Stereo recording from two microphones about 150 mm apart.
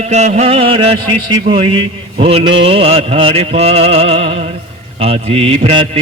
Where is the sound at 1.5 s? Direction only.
35° right (ahead or behind).